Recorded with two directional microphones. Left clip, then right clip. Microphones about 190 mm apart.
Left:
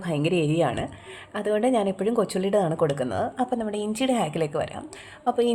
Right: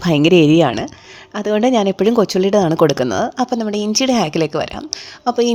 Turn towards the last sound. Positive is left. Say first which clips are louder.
# right 7 dB
turn(degrees=-30)  # may be behind; listen again after turning